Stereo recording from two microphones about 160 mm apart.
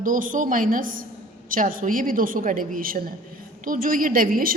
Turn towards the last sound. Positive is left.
turn(degrees=-60)  # may be behind; listen again after turning